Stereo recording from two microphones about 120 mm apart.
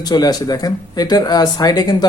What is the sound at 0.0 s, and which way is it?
Speech, 35° left (ahead or behind).